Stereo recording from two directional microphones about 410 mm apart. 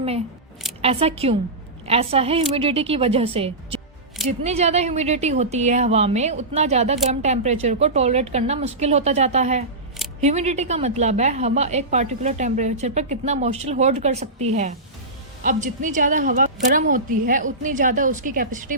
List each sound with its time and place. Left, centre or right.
0.8 s a woman's voice: centre